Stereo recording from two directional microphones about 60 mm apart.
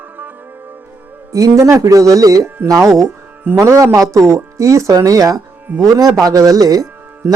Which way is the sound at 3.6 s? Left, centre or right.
Right.